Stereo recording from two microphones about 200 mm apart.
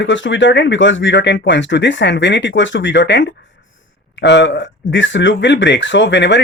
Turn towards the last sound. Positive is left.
turn(degrees=65)  # may be behind; listen again after turning